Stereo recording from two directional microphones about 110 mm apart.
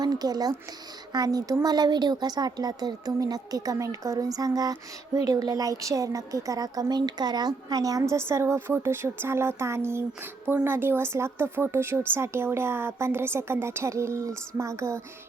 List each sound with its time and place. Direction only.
0.0 s a woman's voice: 35° right (ahead or behind)